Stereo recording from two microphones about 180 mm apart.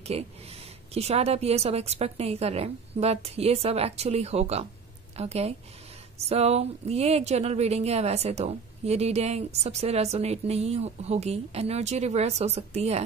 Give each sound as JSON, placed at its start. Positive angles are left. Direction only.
{"t": 0.1, "sound": "speech", "side_deg": -35}